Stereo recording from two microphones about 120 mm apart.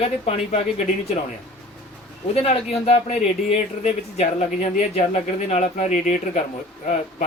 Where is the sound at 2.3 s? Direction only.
60° left (ahead or behind).